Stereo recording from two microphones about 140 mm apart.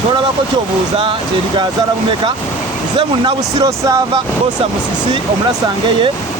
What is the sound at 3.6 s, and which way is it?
Speech, 25° right (ahead or behind).